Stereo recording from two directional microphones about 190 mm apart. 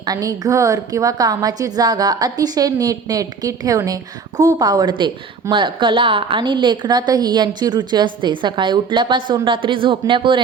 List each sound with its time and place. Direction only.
0.0 s a woman's voice: 20° right (ahead or behind)